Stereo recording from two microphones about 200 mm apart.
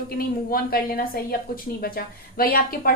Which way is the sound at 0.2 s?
45° left (ahead or behind).